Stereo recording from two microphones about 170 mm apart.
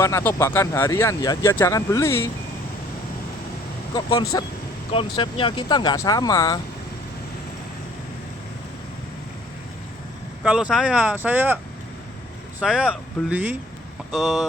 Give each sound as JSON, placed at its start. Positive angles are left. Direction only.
{"t": 0.0, "sound": "speech", "side_deg": 15}
{"t": 3.9, "sound": "speech", "side_deg": 25}
{"t": 10.4, "sound": "speech", "side_deg": -5}